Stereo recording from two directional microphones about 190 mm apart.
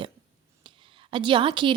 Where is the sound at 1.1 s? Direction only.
25° right (ahead or behind).